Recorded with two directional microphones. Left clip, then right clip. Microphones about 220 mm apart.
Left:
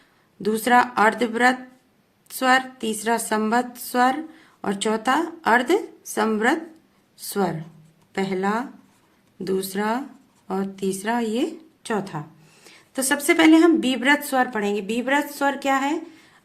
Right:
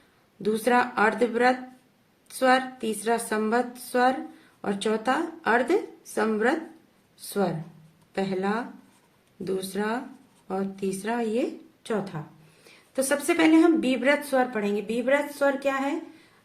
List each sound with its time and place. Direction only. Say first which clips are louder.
0.4 s a woman's voice: left 5 dB; 35° left (ahead or behind)